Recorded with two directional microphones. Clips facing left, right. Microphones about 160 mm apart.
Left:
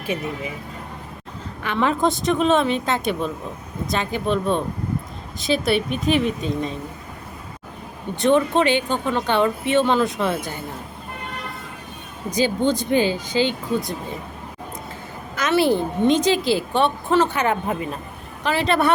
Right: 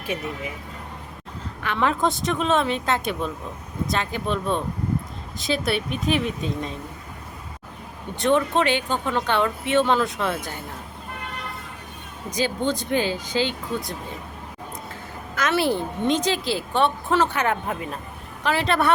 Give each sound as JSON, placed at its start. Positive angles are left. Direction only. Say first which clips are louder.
{"t": 1.6, "sound": "a woman's voice", "louder": "left 2 dB", "side_deg": 0}
{"t": 8.1, "sound": "a woman's voice", "louder": "left 3 dB", "side_deg": 0}
{"t": 12.4, "sound": "a woman's voice", "louder": "left 4 dB", "side_deg": 0}
{"t": 15.4, "sound": "a woman's voice", "louder": "left 4 dB", "side_deg": 0}